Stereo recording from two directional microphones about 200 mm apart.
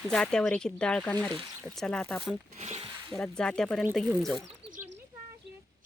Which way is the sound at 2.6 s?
30° right (ahead or behind).